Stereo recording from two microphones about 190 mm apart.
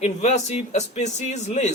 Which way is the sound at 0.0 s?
35° left (ahead or behind).